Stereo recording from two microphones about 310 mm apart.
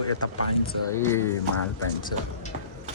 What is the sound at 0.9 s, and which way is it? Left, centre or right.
Speech, centre.